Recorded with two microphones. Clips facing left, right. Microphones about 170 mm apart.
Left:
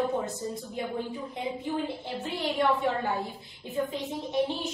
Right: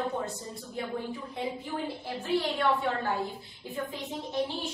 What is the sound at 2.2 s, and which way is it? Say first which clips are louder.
A woman's voice: even; 20° left (ahead or behind).